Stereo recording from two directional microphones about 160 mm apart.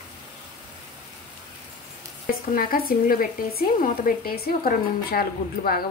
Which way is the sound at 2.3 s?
65° left (ahead or behind).